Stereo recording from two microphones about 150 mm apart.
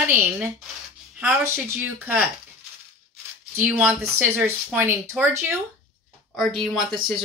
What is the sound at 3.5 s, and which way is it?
A woman's voice, 10° right (ahead or behind).